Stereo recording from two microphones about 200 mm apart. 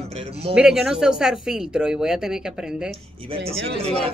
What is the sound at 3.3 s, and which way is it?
Speech, 30° right (ahead or behind).